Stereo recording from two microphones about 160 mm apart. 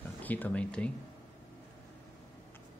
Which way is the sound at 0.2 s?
10° left (ahead or behind).